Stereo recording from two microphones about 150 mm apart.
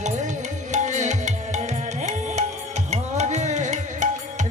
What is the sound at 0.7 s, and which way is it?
Tabla, 55° right (ahead or behind).